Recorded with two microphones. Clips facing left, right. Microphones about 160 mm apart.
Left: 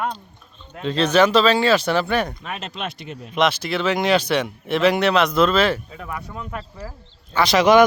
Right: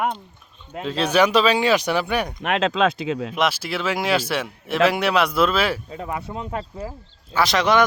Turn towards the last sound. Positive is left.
turn(degrees=0)  # may be behind; listen again after turning